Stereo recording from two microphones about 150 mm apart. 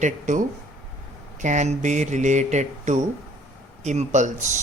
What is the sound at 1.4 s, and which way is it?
Speech, 55° right (ahead or behind).